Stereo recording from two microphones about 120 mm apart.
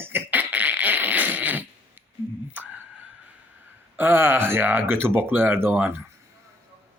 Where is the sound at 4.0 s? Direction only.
20° right (ahead or behind).